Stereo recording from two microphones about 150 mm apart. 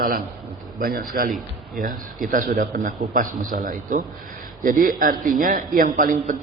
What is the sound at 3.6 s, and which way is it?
Speech, 60° right (ahead or behind).